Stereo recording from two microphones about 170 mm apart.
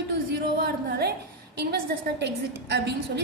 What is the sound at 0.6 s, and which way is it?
A woman's voice, 70° right (ahead or behind).